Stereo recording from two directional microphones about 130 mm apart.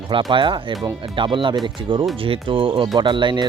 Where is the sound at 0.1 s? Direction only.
40° right (ahead or behind).